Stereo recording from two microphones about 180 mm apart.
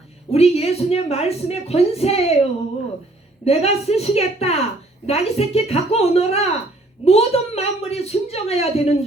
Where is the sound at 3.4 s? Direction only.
35° left (ahead or behind).